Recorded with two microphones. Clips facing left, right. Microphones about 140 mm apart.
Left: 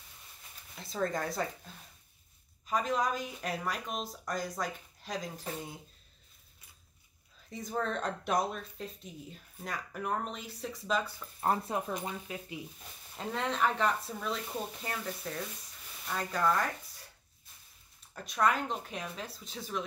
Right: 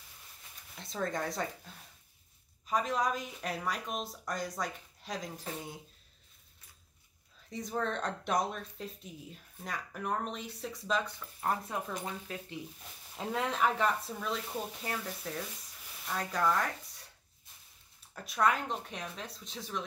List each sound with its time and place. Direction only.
0.7 s speech: centre (ahead or behind)
2.6 s speech: centre (ahead or behind)
7.4 s speech: centre (ahead or behind)
11.4 s speech: 25° left (ahead or behind)
12.3 s speech: 10° left (ahead or behind)
13.1 s speech: 5° right (ahead or behind)
18.1 s speech: centre (ahead or behind)